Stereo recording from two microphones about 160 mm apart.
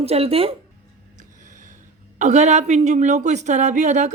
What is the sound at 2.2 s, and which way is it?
A woman's voice, 45° right (ahead or behind).